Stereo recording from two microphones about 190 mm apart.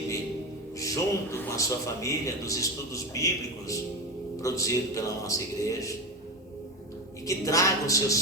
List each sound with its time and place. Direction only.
0.8 s a man's voice: 15° left (ahead or behind)
7.3 s a man's voice: 15° left (ahead or behind)